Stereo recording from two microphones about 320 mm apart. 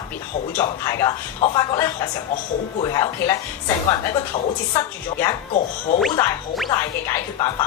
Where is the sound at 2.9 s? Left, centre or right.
Centre.